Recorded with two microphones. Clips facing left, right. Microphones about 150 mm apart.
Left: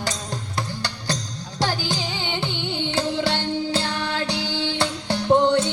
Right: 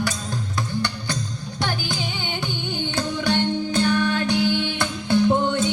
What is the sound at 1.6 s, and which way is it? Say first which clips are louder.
Music: left 3 dB; 35° left (ahead or behind).